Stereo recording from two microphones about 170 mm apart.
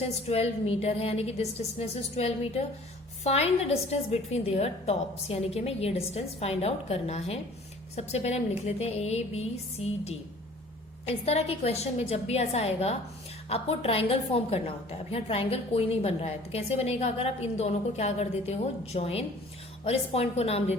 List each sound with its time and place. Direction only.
0.3 s a woman's voice: 35° left (ahead or behind)